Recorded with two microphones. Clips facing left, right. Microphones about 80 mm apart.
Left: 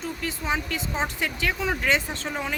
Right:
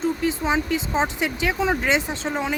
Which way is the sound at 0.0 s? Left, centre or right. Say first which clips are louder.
Right 8 dB; right.